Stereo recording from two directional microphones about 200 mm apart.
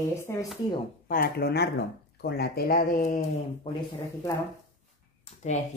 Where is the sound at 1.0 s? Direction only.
45° left (ahead or behind).